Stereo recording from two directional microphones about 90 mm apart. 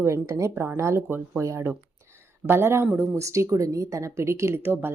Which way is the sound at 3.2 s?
35° right (ahead or behind).